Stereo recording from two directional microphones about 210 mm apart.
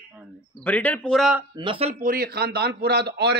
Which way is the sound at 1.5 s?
25° right (ahead or behind).